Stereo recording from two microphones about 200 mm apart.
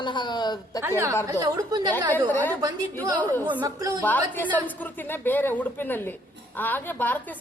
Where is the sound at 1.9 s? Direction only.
10° left (ahead or behind).